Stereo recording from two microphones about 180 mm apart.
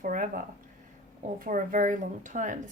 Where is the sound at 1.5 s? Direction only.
45° right (ahead or behind).